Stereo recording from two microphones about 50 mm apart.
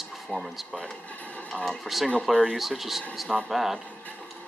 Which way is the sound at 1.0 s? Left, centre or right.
Left.